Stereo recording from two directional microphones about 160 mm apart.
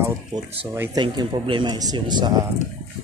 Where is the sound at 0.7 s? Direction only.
15° right (ahead or behind).